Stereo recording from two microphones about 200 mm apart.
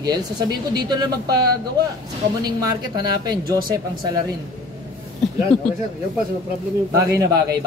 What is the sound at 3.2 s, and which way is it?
Speech, 20° right (ahead or behind).